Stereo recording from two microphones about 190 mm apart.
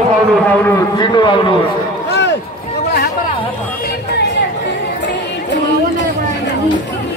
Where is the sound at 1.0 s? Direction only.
25° left (ahead or behind).